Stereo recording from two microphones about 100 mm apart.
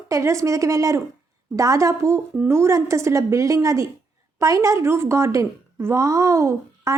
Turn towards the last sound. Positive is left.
turn(degrees=-30)  # may be behind; listen again after turning